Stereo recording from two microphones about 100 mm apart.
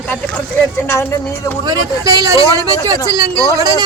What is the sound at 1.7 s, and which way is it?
Speech, 40° right (ahead or behind).